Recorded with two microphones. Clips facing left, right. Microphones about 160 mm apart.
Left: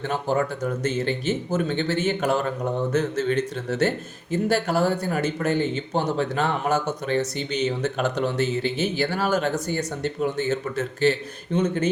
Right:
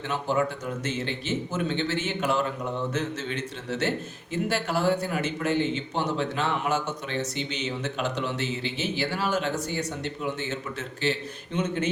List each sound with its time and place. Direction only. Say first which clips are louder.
0.1 s speech: left 2 dB; 45° left (ahead or behind)
1.5 s speech: left 3 dB; 45° left (ahead or behind)